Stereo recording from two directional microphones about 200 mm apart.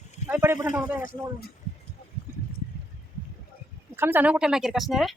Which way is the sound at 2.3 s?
10° right (ahead or behind).